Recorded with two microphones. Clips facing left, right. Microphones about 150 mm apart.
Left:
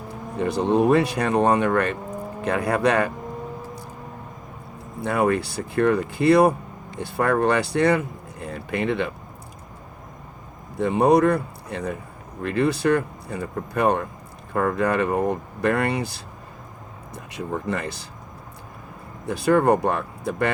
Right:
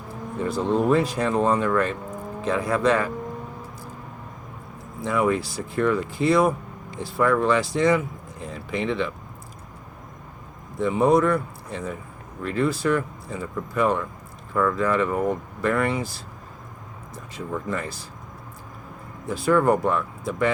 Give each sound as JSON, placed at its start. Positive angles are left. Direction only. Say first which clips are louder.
{"t": 0.3, "sound": "speech", "louder": "left 3 dB", "side_deg": 70}
{"t": 4.9, "sound": "speech", "louder": "left 1 dB", "side_deg": 65}
{"t": 10.8, "sound": "speech", "louder": "left 2 dB", "side_deg": 65}
{"t": 17.7, "sound": "speech", "louder": "left 2 dB", "side_deg": 70}
{"t": 19.2, "sound": "speech", "louder": "left 1 dB", "side_deg": 70}